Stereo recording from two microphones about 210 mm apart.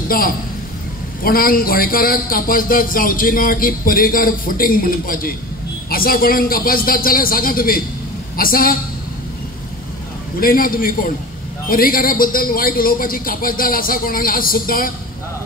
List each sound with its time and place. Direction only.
1.2 s a man's voice: 45° left (ahead or behind)
10.4 s a man's voice: 45° left (ahead or behind)